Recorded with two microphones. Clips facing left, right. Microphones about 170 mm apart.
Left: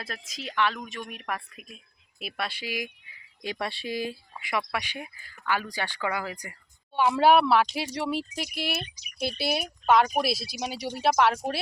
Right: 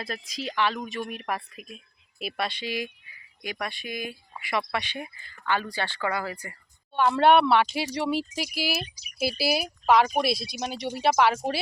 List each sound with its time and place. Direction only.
0.0 s speech: centre (ahead or behind)
2.4 s speech: 10° left (ahead or behind)
3.4 s speech: 30° left (ahead or behind)
4.4 s speech: 10° left (ahead or behind)